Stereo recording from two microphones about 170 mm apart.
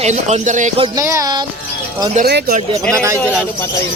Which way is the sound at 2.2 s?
65° right (ahead or behind).